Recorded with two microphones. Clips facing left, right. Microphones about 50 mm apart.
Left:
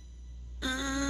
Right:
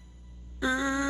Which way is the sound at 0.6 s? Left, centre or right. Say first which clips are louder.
Right 6 dB; centre.